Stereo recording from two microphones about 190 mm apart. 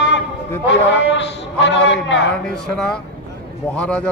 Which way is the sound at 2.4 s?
5° left (ahead or behind).